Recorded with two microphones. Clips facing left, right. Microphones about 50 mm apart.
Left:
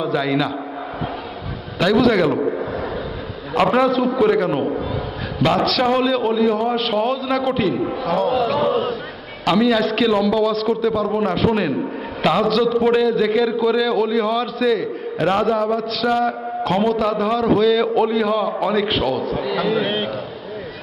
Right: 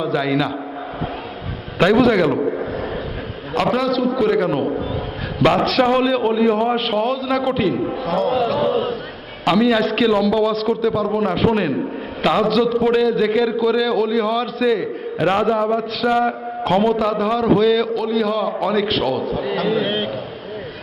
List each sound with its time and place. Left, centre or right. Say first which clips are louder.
0.0 s a man's voice: even; centre
1.8 s a man's voice: right 2 dB; right
2.1 s a man's voice: even; centre
5.4 s a man's voice: right 2 dB; right
5.8 s a man's voice: right 3 dB; centre
14.8 s a man's voice: even; centre
15.5 s a man's voice: right 1 dB; centre
16.0 s a sound: right 1 dB; centre
16.7 s a man's voice: right 2 dB; centre